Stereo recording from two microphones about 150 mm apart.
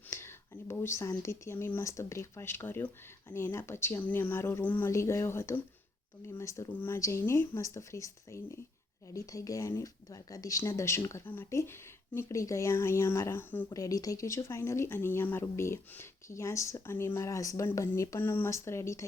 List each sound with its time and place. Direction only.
0.1 s speech: 15° left (ahead or behind)